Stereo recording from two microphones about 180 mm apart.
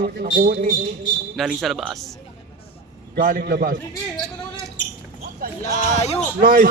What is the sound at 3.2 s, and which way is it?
Speech, 50° right (ahead or behind).